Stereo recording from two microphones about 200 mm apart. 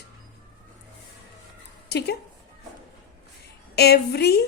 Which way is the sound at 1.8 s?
55° left (ahead or behind).